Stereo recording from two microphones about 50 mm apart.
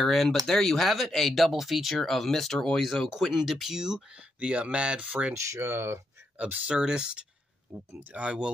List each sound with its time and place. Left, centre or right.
0.0 s speech: centre
3.1 s speech: centre
5.3 s speech: right
6.3 s speech: right
6.8 s speech: centre